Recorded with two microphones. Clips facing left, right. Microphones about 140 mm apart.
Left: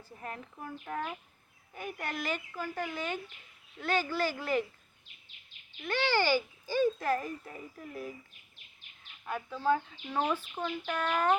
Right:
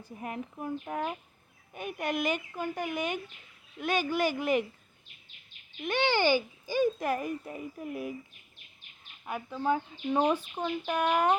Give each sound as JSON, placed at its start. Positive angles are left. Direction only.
{"t": 0.0, "sound": "speech", "side_deg": -15}
{"t": 5.8, "sound": "speech", "side_deg": -20}
{"t": 9.2, "sound": "speech", "side_deg": -15}